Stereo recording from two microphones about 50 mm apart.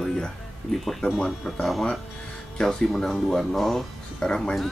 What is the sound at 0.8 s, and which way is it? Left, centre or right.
Speech, centre.